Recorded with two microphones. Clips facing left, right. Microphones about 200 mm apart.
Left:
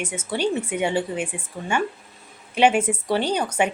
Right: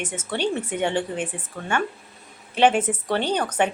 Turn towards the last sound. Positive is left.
turn(degrees=10)  # may be behind; listen again after turning